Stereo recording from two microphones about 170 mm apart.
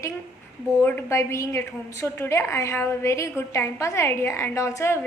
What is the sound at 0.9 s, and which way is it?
A woman's voice, 15° left (ahead or behind).